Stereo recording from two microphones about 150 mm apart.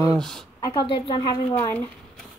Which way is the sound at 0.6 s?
30° left (ahead or behind).